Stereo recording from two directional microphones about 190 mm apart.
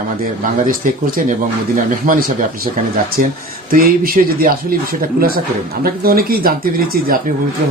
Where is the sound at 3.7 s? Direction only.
50° right (ahead or behind).